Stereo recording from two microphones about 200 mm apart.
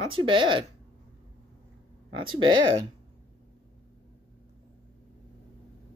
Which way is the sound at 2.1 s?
25° right (ahead or behind).